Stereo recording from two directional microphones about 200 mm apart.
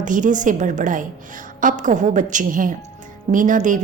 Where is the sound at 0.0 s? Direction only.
40° right (ahead or behind).